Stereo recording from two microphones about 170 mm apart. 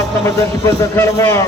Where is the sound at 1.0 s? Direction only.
15° left (ahead or behind).